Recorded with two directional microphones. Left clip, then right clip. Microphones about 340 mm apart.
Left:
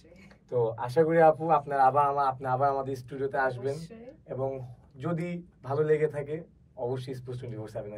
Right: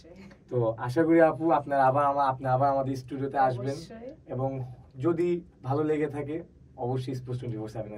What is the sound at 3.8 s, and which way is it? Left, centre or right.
Speech, centre.